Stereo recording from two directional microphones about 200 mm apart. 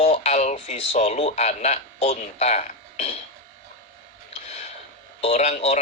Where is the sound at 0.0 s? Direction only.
30° left (ahead or behind).